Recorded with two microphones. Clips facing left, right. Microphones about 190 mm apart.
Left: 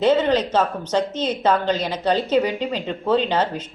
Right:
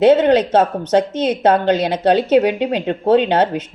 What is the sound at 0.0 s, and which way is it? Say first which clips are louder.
A woman's voice: right 6 dB; 60° right (ahead or behind).